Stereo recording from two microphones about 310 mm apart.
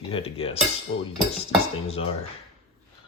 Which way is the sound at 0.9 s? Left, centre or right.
Left.